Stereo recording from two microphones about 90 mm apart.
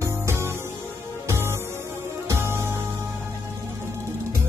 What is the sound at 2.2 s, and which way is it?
Music, 30° right (ahead or behind).